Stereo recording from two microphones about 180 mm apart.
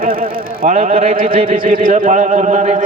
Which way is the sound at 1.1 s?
50° right (ahead or behind).